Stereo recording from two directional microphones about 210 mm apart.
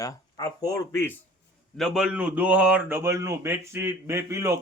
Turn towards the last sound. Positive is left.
turn(degrees=-15)  # may be behind; listen again after turning